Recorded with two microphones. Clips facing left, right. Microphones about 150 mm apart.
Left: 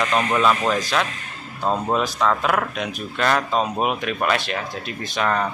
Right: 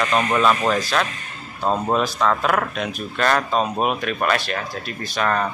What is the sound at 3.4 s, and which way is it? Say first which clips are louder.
Speech: right 1 dB; 10° right (ahead or behind).